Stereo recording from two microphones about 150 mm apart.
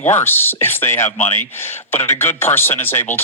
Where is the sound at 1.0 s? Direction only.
50° left (ahead or behind).